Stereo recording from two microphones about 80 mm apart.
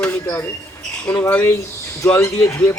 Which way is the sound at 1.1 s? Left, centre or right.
Left.